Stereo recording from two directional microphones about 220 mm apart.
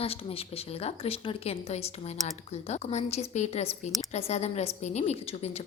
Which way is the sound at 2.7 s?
30° left (ahead or behind).